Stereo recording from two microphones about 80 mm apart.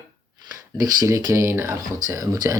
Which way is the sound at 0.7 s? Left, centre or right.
Right.